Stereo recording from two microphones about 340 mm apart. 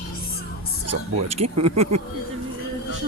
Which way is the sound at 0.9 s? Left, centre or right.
Right.